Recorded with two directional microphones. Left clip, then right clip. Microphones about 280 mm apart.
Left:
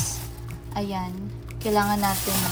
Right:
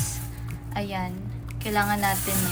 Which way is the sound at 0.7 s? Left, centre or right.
Centre.